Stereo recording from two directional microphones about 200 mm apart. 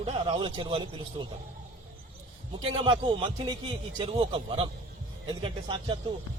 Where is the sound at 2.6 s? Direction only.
25° right (ahead or behind).